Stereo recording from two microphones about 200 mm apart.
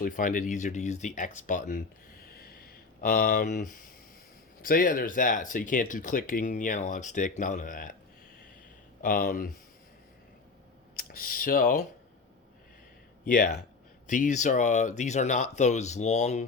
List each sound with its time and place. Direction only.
0.0 s speech: 40° left (ahead or behind)
9.0 s speech: 45° left (ahead or behind)
10.9 s speech: 45° left (ahead or behind)
13.2 s speech: 40° left (ahead or behind)